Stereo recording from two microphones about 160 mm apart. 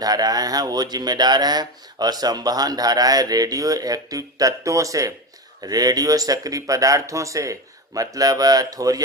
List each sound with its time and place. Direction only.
0.0 s speech: 25° right (ahead or behind)